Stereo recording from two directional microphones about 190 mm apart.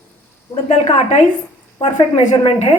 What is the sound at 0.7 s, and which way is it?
Speech, 35° left (ahead or behind).